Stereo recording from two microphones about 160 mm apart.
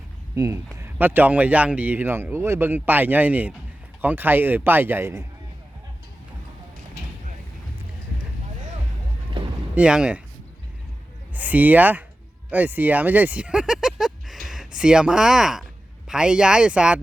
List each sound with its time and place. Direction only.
0.3 s a man's voice: 20° right (ahead or behind)
9.4 s boat: 30° right (ahead or behind)
9.7 s a man's voice: 5° right (ahead or behind)
11.3 s a man's voice: 10° right (ahead or behind)